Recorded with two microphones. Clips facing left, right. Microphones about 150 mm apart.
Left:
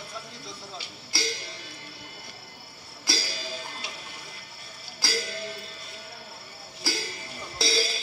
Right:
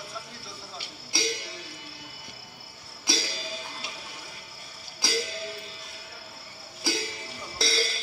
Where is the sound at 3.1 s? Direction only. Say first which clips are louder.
Right 1 dB; 20° right (ahead or behind).